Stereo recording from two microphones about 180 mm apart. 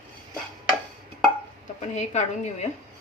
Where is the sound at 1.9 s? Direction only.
40° left (ahead or behind).